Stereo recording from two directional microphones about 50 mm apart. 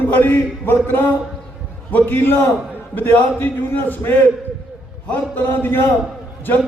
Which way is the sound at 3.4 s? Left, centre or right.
Left.